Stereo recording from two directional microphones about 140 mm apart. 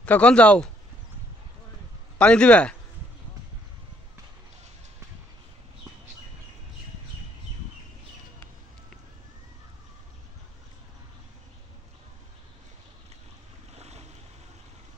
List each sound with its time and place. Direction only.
0.0 s speech: 10° left (ahead or behind)
2.1 s speech: 5° left (ahead or behind)
13.7 s waves: 50° right (ahead or behind)